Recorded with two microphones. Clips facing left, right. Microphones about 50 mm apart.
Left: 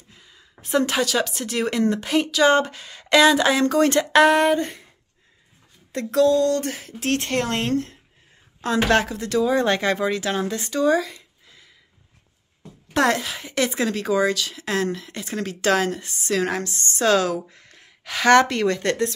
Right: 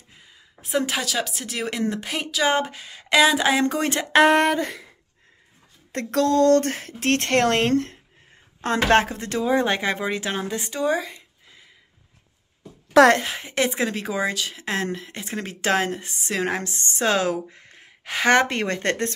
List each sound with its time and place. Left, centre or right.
0.1 s a woman's voice: centre
4.5 s speech: right
5.9 s speech: right
8.5 s a woman's voice: right
9.7 s speech: centre
13.2 s speech: right